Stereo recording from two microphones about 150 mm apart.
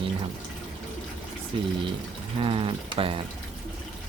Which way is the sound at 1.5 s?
35° right (ahead or behind).